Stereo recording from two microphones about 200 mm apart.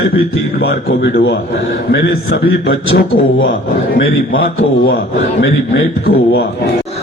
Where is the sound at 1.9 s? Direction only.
60° left (ahead or behind).